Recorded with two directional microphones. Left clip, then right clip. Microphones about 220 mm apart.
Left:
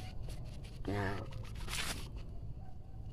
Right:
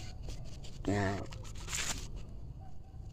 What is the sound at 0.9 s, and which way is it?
Speech, 40° right (ahead or behind).